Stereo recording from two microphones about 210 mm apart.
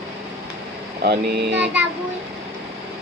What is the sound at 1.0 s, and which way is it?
Speech, 50° right (ahead or behind).